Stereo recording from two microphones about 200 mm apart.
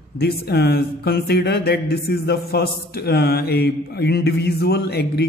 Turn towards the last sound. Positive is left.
turn(degrees=55)  # may be behind; listen again after turning